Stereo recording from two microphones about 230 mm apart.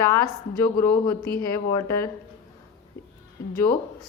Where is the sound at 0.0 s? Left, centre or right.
Centre.